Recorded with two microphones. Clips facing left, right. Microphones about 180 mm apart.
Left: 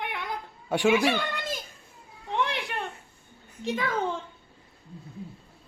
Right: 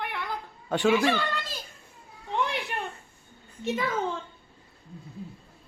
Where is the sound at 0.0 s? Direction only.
20° left (ahead or behind).